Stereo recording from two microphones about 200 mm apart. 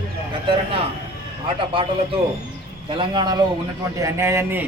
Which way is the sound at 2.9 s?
20° right (ahead or behind).